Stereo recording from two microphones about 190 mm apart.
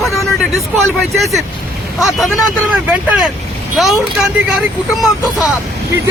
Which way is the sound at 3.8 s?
Centre (ahead or behind).